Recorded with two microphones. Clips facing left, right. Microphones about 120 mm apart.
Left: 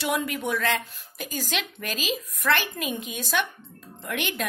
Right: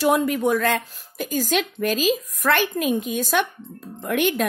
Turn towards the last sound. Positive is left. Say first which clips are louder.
# right 9 dB
turn(degrees=-45)  # may be behind; listen again after turning